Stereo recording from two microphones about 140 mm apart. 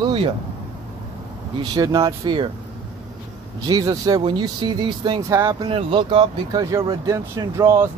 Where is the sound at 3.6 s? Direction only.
25° right (ahead or behind).